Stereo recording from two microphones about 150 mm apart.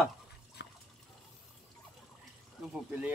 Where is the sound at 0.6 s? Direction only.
90° left.